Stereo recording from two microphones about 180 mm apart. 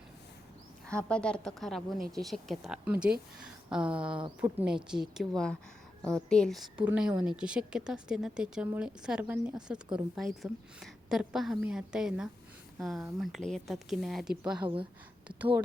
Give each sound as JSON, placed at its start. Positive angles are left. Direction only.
{"t": 1.0, "sound": "speech", "side_deg": 5}
{"t": 6.0, "sound": "a woman's voice", "side_deg": -20}
{"t": 6.2, "sound": "speech", "side_deg": 5}